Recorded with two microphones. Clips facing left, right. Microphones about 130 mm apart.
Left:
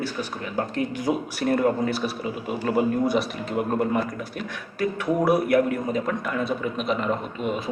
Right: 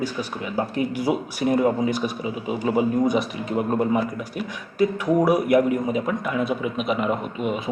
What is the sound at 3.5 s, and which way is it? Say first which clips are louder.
Speech: right 2 dB; centre (ahead or behind).